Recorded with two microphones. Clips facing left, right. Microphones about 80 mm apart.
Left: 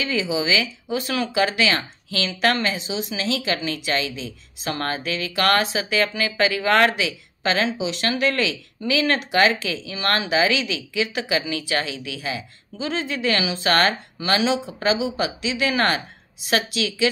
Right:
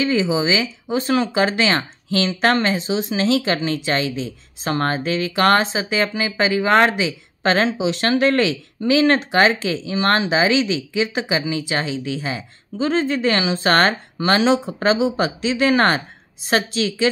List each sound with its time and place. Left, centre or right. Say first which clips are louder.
0.0 s speech: right 5 dB; right
7.4 s speech: right 4 dB; right